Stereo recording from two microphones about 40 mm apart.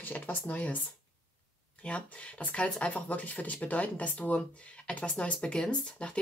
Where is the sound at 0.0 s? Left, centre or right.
Left.